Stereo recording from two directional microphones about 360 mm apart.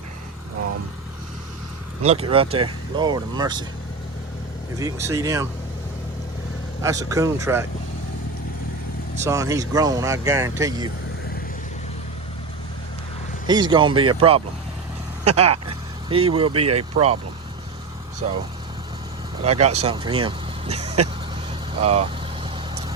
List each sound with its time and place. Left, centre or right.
2.0 s speech: centre
4.8 s speech: centre
6.8 s speech: centre
9.2 s speech: centre
13.5 s speech: centre
16.0 s speech: centre
18.2 s speech: centre
19.4 s speech: centre
21.8 s vehicle: centre